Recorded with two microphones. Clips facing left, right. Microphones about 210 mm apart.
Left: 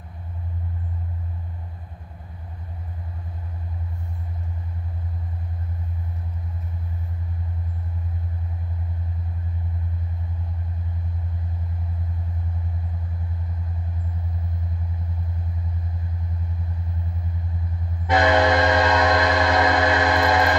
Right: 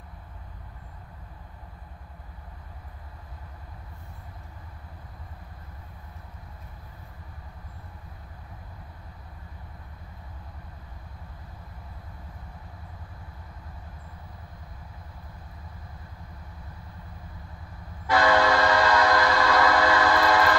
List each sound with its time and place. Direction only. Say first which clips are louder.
18.0 s train: left 3 dB; 20° left (ahead or behind)